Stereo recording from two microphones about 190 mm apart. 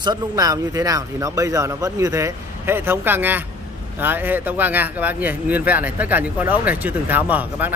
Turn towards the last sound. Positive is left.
turn(degrees=-10)  # may be behind; listen again after turning